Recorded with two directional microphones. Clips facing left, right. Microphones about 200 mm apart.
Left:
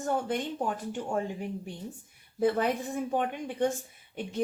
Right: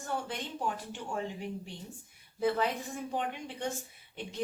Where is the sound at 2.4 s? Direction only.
50° left (ahead or behind).